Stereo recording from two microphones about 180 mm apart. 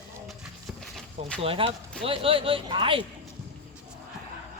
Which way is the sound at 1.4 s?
30° right (ahead or behind).